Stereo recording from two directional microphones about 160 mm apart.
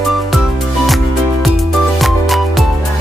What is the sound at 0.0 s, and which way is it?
Music, centre (ahead or behind).